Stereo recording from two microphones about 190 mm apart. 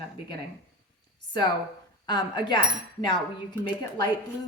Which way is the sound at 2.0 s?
25° left (ahead or behind).